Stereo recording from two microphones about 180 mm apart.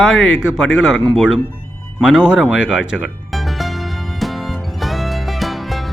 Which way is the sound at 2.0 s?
5° right (ahead or behind).